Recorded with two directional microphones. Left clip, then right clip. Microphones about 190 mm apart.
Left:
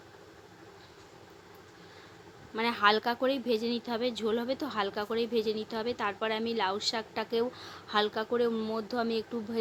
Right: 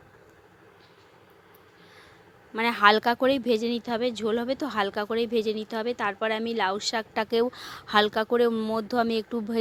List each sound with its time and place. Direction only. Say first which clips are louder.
2.5 s a woman's voice: right 6 dB; 40° right (ahead or behind)